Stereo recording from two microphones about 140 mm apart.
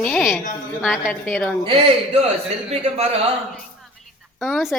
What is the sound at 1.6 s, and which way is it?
Speech, 45° right (ahead or behind).